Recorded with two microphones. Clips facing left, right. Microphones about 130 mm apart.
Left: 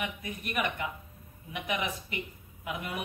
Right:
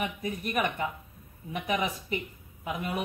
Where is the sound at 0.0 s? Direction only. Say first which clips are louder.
Right 4 dB; 35° right (ahead or behind).